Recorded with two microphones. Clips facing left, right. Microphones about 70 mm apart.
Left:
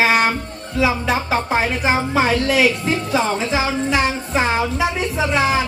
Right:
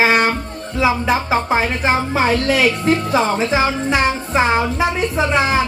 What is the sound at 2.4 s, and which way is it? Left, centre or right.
A child's voice, right.